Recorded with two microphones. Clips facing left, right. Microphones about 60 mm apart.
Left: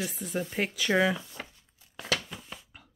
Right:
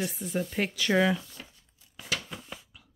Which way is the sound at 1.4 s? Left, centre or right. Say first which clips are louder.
Left 5 dB; left.